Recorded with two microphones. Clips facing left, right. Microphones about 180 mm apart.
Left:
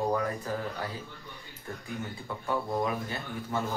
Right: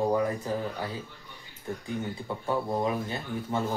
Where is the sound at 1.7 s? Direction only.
25° right (ahead or behind).